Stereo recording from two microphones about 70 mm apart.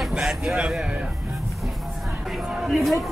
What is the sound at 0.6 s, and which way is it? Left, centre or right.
Speech, centre.